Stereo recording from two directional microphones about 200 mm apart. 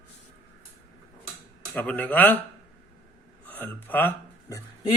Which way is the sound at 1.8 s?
5° left (ahead or behind).